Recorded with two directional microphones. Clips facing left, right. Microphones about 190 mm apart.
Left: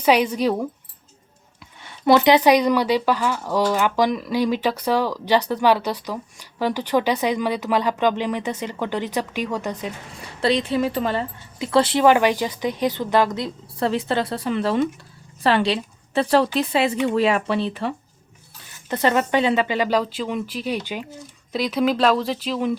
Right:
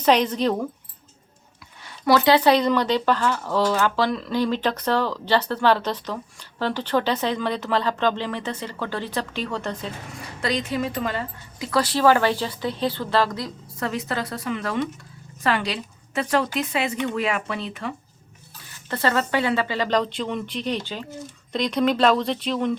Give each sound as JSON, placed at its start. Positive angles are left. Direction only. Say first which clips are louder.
{"t": 0.0, "sound": "speech", "louder": "left 1 dB", "side_deg": 10}
{"t": 2.0, "sound": "speech", "louder": "left 2 dB", "side_deg": 20}
{"t": 10.4, "sound": "a woman's voice", "louder": "left 5 dB", "side_deg": 30}
{"t": 18.9, "sound": "speech", "louder": "left 3 dB", "side_deg": 20}